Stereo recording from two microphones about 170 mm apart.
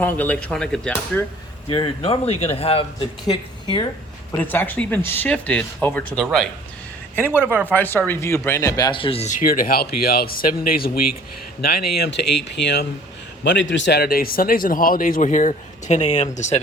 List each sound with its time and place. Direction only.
0.0 s speech: 10° left (ahead or behind)
1.6 s speech: 30° left (ahead or behind)
4.4 s speech: 10° left (ahead or behind)
7.4 s speech: 10° right (ahead or behind)
7.7 s speech: 10° left (ahead or behind); by 11.0 s 60° left (ahead or behind)
11.6 s speech: 70° left (ahead or behind)
13.4 s a man's voice: 90° left; by 16.6 s 45° left (ahead or behind)